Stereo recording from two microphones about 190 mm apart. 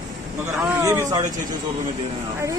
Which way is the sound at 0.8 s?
15° right (ahead or behind).